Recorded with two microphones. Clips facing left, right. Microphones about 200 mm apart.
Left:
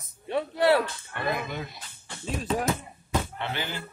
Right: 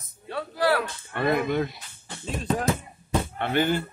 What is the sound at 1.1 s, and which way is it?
Speech, 55° right (ahead or behind).